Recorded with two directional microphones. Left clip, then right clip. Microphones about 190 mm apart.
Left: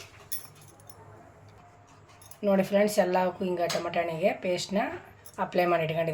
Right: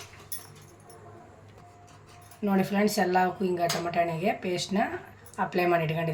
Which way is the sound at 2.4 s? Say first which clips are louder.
Left 3 dB; 15° left (ahead or behind).